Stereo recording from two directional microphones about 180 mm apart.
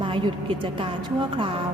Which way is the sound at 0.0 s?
30° right (ahead or behind).